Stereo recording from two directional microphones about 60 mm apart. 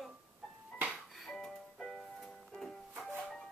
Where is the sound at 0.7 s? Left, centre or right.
Centre.